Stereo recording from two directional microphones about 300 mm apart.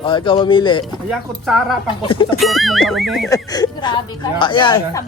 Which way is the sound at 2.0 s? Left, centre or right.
Centre.